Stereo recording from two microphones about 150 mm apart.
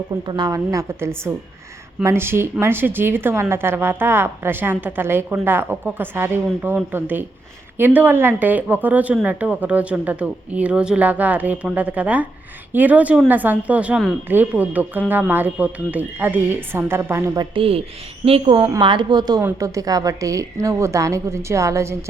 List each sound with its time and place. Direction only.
0.3 s a woman's voice: 25° right (ahead or behind)
17.5 s a woman's voice: 40° right (ahead or behind); by 21.9 s 20° right (ahead or behind)